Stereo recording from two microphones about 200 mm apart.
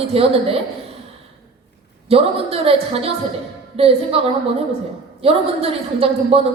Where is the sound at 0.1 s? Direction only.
30° right (ahead or behind).